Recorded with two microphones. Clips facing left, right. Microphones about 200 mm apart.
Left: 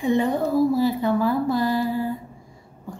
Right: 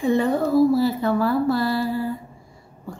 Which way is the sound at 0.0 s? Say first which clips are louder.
Right 1 dB; 15° left (ahead or behind).